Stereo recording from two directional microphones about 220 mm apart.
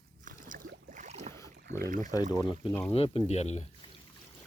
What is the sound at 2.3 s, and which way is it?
Speech, 20° left (ahead or behind).